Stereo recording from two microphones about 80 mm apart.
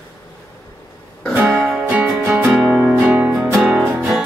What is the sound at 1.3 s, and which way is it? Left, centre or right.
Music, centre.